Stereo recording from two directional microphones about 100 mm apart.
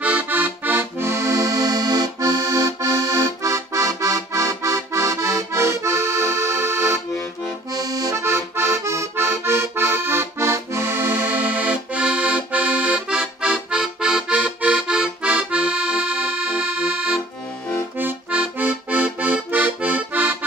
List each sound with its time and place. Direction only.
0.0 s accordion: 15° right (ahead or behind)
17.9 s music: 15° right (ahead or behind)